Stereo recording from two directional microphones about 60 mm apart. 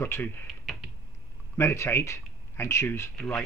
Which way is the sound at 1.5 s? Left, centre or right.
Left.